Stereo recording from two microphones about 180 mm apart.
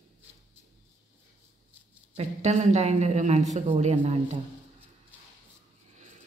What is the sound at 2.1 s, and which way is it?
Speech, 40° right (ahead or behind).